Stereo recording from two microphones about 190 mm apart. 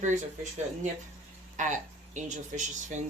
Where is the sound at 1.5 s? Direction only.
40° right (ahead or behind).